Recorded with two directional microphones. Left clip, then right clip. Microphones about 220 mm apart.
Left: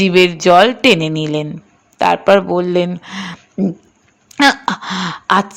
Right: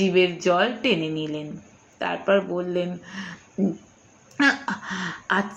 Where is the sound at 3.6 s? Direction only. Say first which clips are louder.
Left 6 dB; 40° left (ahead or behind).